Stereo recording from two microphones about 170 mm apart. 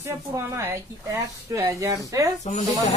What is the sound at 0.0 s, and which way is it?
Speech, 15° right (ahead or behind).